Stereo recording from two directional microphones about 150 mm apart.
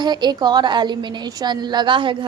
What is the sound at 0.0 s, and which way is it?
A woman's voice, 30° right (ahead or behind).